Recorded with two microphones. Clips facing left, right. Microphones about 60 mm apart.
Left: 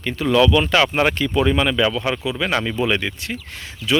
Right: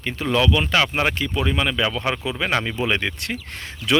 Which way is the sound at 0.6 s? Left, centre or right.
Centre.